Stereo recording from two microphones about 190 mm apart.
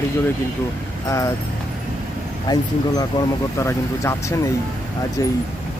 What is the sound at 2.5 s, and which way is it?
Speech, 20° left (ahead or behind).